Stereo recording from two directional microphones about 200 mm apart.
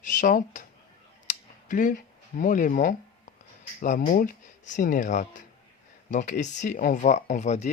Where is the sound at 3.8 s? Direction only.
40° left (ahead or behind).